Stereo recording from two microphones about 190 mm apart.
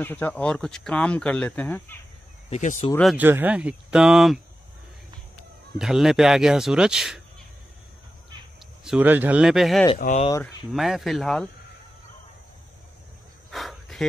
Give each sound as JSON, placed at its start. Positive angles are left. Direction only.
{"t": 0.0, "sound": "speech", "side_deg": 10}
{"t": 2.5, "sound": "speech", "side_deg": 35}
{"t": 3.0, "sound": "speech", "side_deg": 0}
{"t": 5.8, "sound": "speech", "side_deg": 0}
{"t": 8.8, "sound": "speech", "side_deg": -5}
{"t": 9.9, "sound": "speech", "side_deg": 45}
{"t": 10.4, "sound": "speech", "side_deg": 0}
{"t": 13.5, "sound": "cricket", "side_deg": 0}